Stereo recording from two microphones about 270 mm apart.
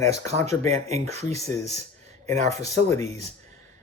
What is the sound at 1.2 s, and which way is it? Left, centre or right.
Speech, centre.